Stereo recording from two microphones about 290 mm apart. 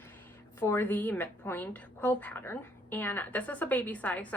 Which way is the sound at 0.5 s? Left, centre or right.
Centre.